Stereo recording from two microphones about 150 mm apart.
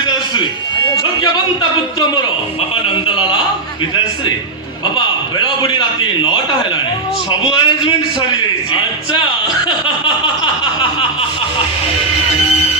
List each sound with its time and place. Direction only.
2.8 s a sound: 35° left (ahead or behind)
5.6 s a man's voice: 30° left (ahead or behind)
7.5 s a man's voice: 30° left (ahead or behind)